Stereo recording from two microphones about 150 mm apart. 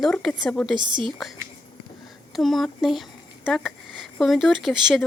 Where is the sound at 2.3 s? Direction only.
Centre (ahead or behind).